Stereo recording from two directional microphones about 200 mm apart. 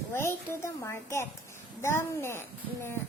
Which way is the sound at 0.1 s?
15° left (ahead or behind).